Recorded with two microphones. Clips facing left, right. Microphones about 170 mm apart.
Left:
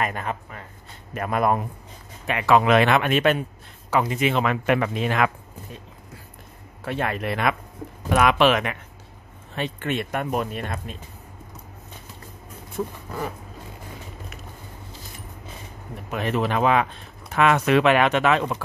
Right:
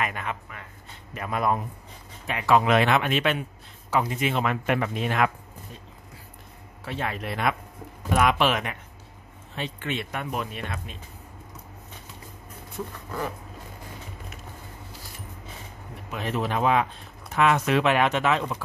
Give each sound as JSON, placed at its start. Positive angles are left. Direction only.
{"t": 0.0, "sound": "speech", "side_deg": 40}
{"t": 1.1, "sound": "a man's voice", "side_deg": 55}
{"t": 2.2, "sound": "speech", "side_deg": 75}
{"t": 3.9, "sound": "speech", "side_deg": 90}
{"t": 6.8, "sound": "a man's voice", "side_deg": 60}
{"t": 8.1, "sound": "speech", "side_deg": 90}
{"t": 9.6, "sound": "speech", "side_deg": 50}
{"t": 12.8, "sound": "speech", "side_deg": 50}
{"t": 16.1, "sound": "speech", "side_deg": 65}
{"t": 17.3, "sound": "speech", "side_deg": 70}